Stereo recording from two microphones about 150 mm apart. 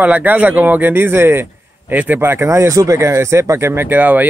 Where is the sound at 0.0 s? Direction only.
10° right (ahead or behind).